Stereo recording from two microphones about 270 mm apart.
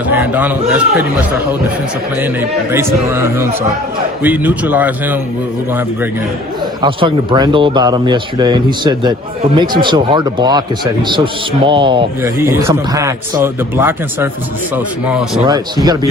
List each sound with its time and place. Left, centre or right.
0.1 s a man's voice: centre
2.7 s a man's voice: centre
6.8 s a man's voice: centre